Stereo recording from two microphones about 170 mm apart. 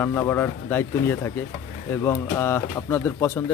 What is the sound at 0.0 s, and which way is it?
Speech, 15° left (ahead or behind).